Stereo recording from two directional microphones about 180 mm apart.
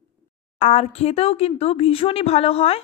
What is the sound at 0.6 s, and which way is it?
Speech, 40° left (ahead or behind).